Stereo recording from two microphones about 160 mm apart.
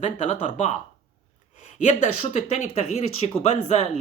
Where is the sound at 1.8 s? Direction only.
50° left (ahead or behind).